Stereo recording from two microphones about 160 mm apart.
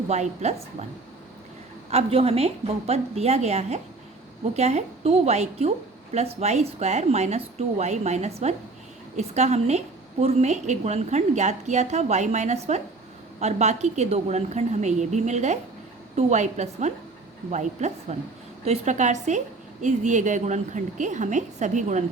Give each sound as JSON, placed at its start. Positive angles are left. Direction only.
{"t": 0.1, "sound": "a woman's voice", "side_deg": -45}
{"t": 1.9, "sound": "a woman's voice", "side_deg": -40}